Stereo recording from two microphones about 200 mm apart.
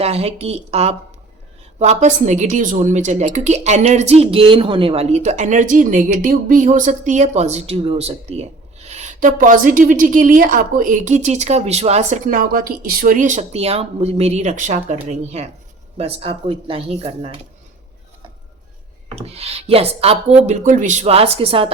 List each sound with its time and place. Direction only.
0.0 s a woman's voice: 30° right (ahead or behind)
19.1 s a woman's voice: 30° right (ahead or behind)